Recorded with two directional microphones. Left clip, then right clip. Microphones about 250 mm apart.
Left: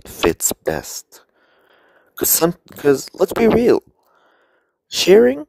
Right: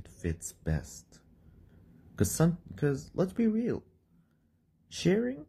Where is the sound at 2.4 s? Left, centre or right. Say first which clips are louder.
Left 17 dB; left.